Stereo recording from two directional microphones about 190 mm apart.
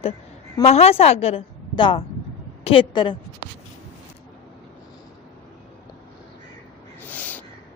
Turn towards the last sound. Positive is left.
turn(degrees=10)  # may be behind; listen again after turning